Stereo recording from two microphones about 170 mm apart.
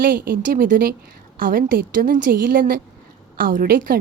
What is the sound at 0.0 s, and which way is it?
A woman's voice, 60° right (ahead or behind).